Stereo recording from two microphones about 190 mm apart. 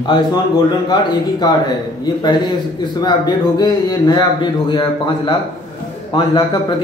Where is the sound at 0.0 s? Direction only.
25° left (ahead or behind).